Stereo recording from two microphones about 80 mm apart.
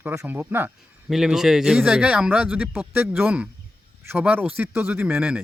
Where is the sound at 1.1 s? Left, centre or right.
Centre.